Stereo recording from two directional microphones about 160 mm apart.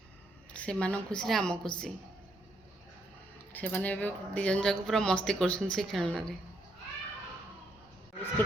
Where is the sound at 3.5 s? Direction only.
10° left (ahead or behind).